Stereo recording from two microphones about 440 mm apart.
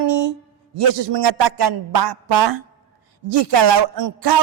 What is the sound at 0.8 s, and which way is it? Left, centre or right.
A woman's voice, right.